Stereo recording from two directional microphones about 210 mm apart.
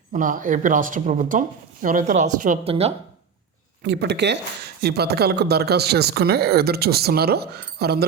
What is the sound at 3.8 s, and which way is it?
Speech, 55° right (ahead or behind).